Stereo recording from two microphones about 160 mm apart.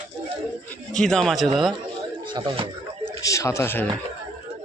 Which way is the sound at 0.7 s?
5° left (ahead or behind).